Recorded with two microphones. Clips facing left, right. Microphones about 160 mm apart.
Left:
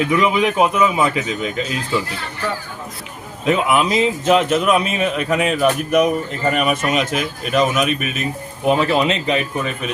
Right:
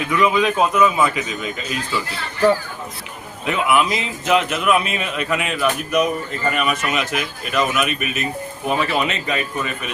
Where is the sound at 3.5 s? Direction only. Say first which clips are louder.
Left 2 dB; 35° left (ahead or behind).